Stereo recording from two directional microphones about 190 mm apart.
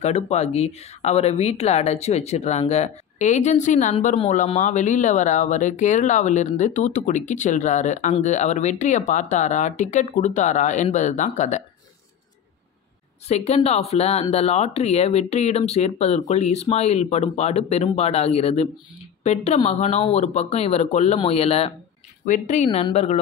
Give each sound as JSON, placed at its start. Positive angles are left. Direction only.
{"t": 0.0, "sound": "speech", "side_deg": 35}
{"t": 13.3, "sound": "speech", "side_deg": 35}